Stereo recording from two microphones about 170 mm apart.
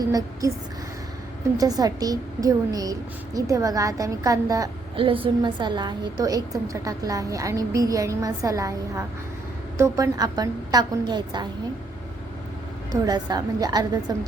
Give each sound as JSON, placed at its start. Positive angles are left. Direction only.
{"t": 0.0, "sound": "a woman's voice", "side_deg": -20}
{"t": 1.5, "sound": "a woman's voice", "side_deg": -20}
{"t": 4.9, "sound": "a woman's voice", "side_deg": -30}
{"t": 12.9, "sound": "a woman's voice", "side_deg": -25}